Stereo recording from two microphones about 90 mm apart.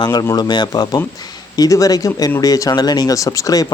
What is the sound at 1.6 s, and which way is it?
Speech, 40° left (ahead or behind).